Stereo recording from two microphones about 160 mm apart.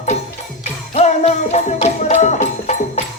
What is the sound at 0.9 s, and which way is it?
Music, 40° left (ahead or behind).